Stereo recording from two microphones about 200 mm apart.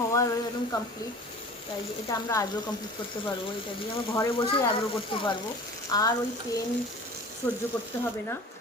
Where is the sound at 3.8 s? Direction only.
20° left (ahead or behind).